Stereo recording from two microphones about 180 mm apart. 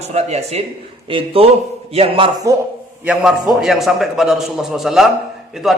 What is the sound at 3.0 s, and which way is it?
A man's voice, 5° right (ahead or behind).